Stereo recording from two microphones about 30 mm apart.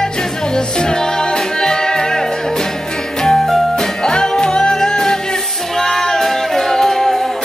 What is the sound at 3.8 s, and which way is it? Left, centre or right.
Music, left.